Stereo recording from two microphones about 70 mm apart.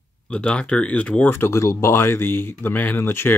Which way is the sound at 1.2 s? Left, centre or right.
Left.